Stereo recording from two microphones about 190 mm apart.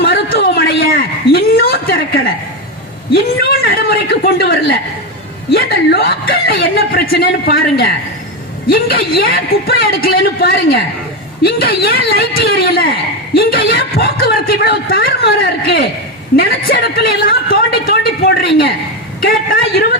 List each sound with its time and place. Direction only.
0.0 s a sound: 55° left (ahead or behind)
3.4 s a woman's voice: 50° left (ahead or behind)
5.5 s a woman's voice: 60° left (ahead or behind)